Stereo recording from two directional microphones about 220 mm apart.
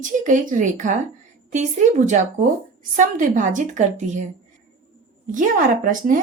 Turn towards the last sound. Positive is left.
turn(degrees=-40)  # may be behind; listen again after turning